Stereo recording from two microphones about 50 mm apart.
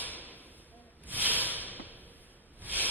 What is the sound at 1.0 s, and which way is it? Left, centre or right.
Snake, right.